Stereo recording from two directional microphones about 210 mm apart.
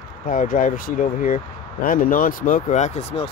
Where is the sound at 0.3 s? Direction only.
40° left (ahead or behind).